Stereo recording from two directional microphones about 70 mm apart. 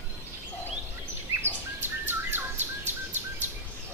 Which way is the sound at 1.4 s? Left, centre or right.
Right.